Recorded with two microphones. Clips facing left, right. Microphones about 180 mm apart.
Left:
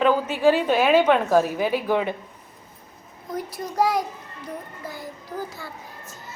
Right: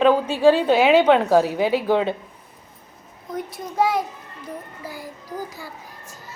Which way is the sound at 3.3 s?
Centre (ahead or behind).